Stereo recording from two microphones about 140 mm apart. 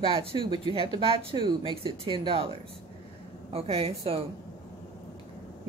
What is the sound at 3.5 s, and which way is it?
Speech, 45° right (ahead or behind).